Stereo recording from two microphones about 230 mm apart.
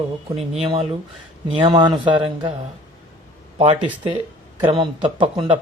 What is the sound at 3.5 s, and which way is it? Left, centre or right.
Speech, right.